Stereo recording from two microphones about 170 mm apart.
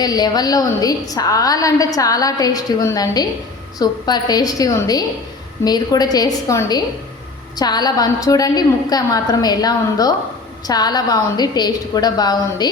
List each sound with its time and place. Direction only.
0.0 s a woman's voice: 25° left (ahead or behind)